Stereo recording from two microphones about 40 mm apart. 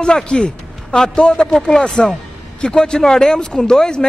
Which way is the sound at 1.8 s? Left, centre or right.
Left.